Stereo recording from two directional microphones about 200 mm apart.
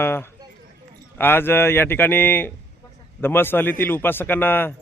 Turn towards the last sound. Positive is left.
turn(degrees=10)  # may be behind; listen again after turning